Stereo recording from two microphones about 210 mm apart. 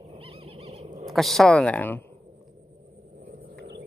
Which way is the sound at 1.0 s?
Centre (ahead or behind).